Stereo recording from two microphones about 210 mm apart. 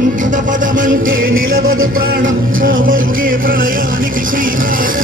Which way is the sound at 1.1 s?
70° right (ahead or behind).